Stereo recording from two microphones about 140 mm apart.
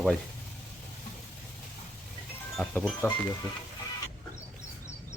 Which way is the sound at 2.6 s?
5° left (ahead or behind).